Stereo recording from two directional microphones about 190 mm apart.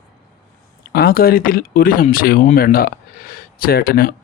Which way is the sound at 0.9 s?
55° left (ahead or behind).